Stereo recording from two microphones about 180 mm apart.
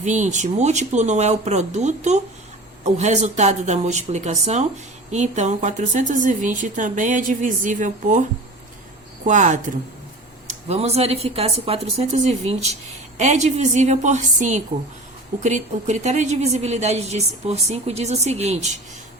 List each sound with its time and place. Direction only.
0.0 s a woman's voice: 40° right (ahead or behind)
9.2 s a woman's voice: 40° right (ahead or behind)
10.7 s a woman's voice: 35° right (ahead or behind)